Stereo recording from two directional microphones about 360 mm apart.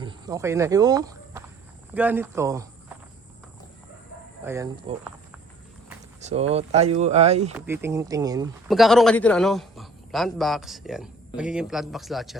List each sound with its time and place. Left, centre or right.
0.0 s speech: centre
4.4 s speech: centre
6.1 s speech: centre
7.7 s speech: centre